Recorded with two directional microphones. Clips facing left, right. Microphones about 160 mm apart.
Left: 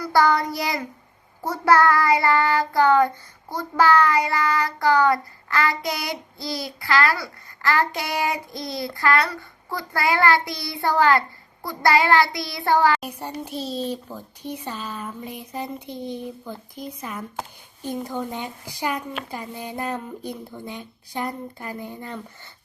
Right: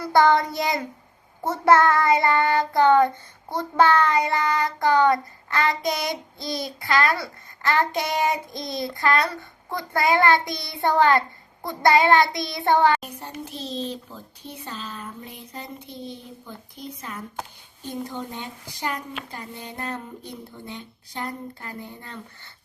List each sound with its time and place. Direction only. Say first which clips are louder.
0.0 s child singing: right 1 dB; 20° right (ahead or behind)
13.0 s speech: left 4 dB; 10° left (ahead or behind)
18.3 s speech: left 4 dB; 10° left (ahead or behind)